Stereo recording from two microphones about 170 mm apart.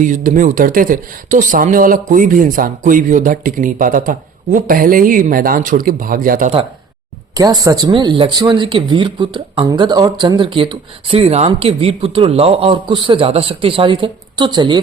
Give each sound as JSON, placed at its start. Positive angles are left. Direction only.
{"t": 0.0, "sound": "speech", "side_deg": -50}
{"t": 7.3, "sound": "speech", "side_deg": -20}